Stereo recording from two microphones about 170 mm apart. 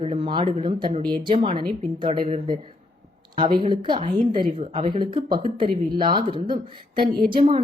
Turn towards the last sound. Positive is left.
turn(degrees=-30)  # may be behind; listen again after turning